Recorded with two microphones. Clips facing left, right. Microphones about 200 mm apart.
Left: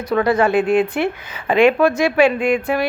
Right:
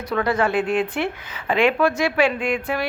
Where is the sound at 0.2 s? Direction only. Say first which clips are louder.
Left 5 dB; 15° left (ahead or behind).